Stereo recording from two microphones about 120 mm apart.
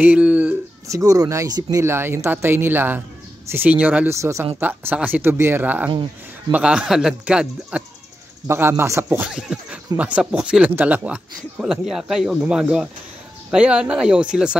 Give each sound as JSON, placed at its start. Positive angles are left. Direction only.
{"t": 0.0, "sound": "speech", "side_deg": -10}
{"t": 0.8, "sound": "speech", "side_deg": -25}
{"t": 4.2, "sound": "speech", "side_deg": -25}
{"t": 4.6, "sound": "speech", "side_deg": -15}
{"t": 8.5, "sound": "speech", "side_deg": -20}
{"t": 9.2, "sound": "speech", "side_deg": -5}